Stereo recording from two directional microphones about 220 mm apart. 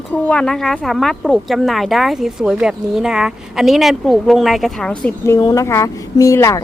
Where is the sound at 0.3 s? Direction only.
5° left (ahead or behind).